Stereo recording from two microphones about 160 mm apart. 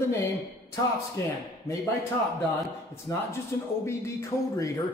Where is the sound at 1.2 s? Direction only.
20° left (ahead or behind).